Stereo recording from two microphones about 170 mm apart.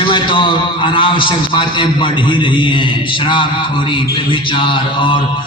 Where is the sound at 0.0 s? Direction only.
30° left (ahead or behind).